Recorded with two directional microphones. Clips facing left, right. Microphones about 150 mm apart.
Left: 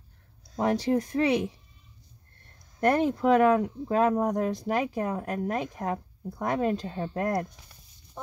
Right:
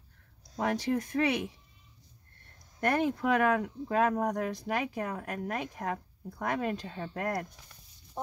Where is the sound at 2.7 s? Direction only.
35° left (ahead or behind).